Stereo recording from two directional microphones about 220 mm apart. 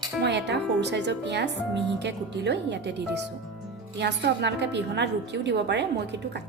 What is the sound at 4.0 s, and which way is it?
A woman's voice, 50° right (ahead or behind).